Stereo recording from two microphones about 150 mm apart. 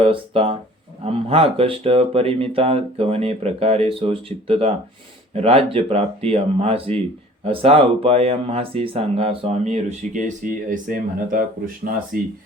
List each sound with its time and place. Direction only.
0.0 s speech: 40° right (ahead or behind); by 12.3 s 70° right (ahead or behind)